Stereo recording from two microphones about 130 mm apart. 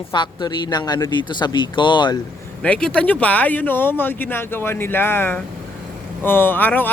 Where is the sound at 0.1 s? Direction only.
35° left (ahead or behind).